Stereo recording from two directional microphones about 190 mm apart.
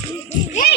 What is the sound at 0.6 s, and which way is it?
Speech, 50° left (ahead or behind).